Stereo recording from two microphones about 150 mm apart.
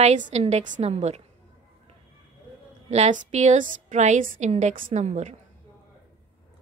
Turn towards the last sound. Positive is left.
turn(degrees=-50)  # may be behind; listen again after turning